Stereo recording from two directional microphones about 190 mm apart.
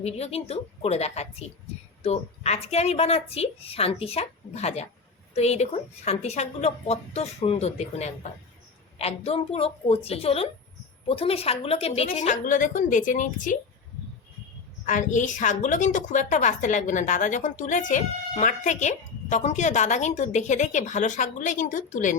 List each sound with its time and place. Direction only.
0.0 s a woman's voice: 35° left (ahead or behind)
14.8 s a woman's voice: 40° left (ahead or behind)